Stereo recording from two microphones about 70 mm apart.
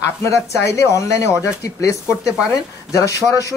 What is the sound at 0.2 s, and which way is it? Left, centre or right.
A woman's voice, left.